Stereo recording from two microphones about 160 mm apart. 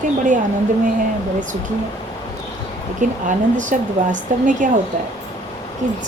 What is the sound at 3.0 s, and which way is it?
Speech, 50° right (ahead or behind).